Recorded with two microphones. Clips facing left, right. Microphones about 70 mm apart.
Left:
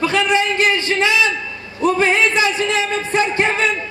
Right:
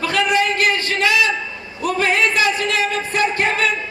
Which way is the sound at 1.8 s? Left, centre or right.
Left.